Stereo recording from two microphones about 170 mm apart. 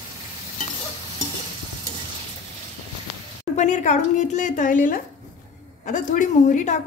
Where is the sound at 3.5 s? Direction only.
45° left (ahead or behind).